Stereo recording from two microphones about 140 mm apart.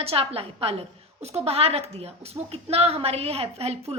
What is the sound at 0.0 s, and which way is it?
A woman's voice, 45° right (ahead or behind).